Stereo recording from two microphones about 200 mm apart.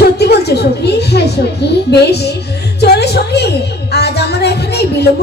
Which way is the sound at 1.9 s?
55° left (ahead or behind).